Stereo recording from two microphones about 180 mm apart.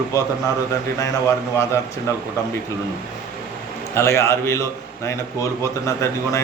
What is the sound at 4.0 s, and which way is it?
A man's voice, 15° left (ahead or behind).